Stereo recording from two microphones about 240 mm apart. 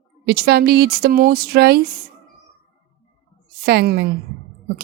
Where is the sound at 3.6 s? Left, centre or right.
Right.